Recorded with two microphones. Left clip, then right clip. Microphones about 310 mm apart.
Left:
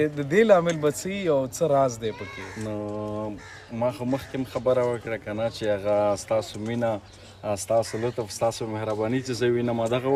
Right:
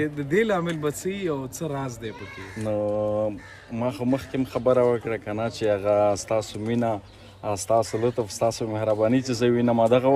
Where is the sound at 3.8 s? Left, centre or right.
Centre.